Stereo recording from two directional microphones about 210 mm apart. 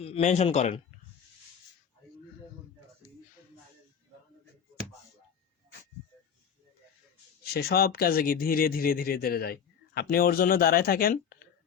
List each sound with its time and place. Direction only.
0.0 s speech: 30° left (ahead or behind)
7.5 s speech: 45° left (ahead or behind)